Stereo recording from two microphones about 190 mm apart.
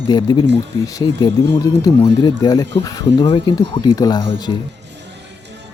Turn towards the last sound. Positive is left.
turn(degrees=20)  # may be behind; listen again after turning